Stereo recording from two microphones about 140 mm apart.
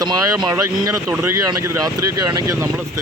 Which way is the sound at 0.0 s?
25° right (ahead or behind).